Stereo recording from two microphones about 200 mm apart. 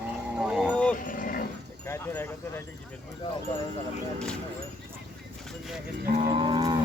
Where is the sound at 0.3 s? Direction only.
Centre (ahead or behind).